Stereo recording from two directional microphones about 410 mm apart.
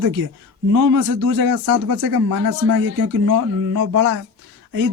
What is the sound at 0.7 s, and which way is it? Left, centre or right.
Speech, right.